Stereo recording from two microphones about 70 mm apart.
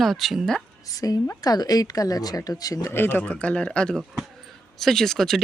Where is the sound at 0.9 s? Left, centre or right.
Left.